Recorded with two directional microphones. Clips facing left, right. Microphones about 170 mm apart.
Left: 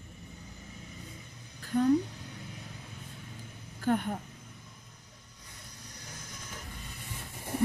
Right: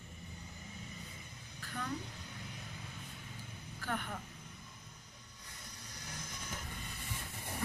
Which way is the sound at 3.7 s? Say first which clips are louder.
Left 11 dB; 45° left (ahead or behind).